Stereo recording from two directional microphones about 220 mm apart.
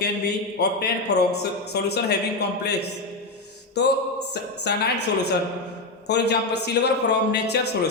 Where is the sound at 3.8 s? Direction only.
50° left (ahead or behind).